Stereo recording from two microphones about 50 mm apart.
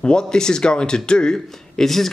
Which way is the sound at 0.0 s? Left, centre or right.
Centre.